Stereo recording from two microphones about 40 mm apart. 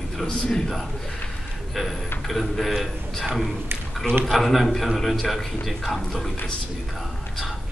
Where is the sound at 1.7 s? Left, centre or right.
Centre.